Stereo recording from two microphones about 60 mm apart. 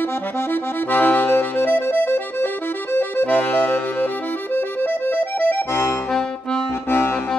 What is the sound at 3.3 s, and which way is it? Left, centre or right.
Music, left.